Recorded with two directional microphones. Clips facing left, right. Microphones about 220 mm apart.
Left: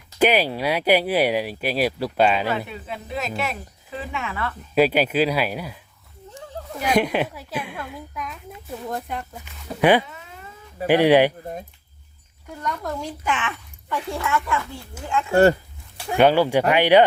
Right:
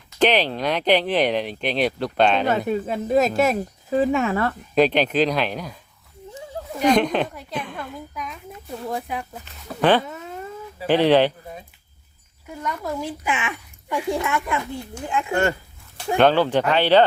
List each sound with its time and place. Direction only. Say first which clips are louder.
0.2 s speech: even; 10° left (ahead or behind)
2.5 s speech: right 6 dB; 45° right (ahead or behind)
4.7 s speech: even; 5° left (ahead or behind)
6.7 s a woman's voice: right 2 dB; 5° left (ahead or behind)
9.4 s speech: left 2 dB; 10° left (ahead or behind)
10.0 s cat: right 6 dB; 45° right (ahead or behind)
10.8 s speech: left 1 dB; 10° left (ahead or behind)
12.5 s speech: right 1 dB; 5° right (ahead or behind)
15.3 s speech: left 7 dB; 35° left (ahead or behind)
16.1 s speech: left 1 dB; 10° left (ahead or behind)